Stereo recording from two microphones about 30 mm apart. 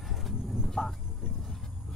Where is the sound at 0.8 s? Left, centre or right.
Right.